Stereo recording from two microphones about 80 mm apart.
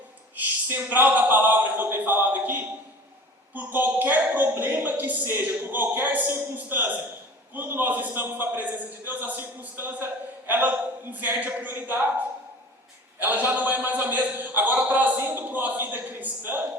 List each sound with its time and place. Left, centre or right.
0.3 s a man's voice: right
13.1 s a man's voice: right